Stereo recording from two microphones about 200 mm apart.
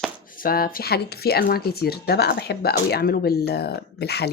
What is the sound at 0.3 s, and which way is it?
Speech, 45° left (ahead or behind).